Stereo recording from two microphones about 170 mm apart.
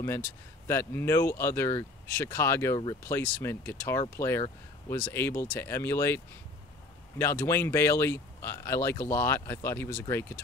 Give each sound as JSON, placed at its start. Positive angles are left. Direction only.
{"t": 0.7, "sound": "speech", "side_deg": 15}
{"t": 3.2, "sound": "speech", "side_deg": 10}